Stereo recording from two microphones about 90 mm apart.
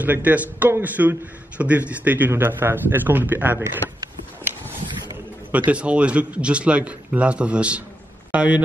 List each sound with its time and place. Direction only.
0.0 s a man's voice: 20° right (ahead or behind)
5.7 s a man's voice: 15° right (ahead or behind)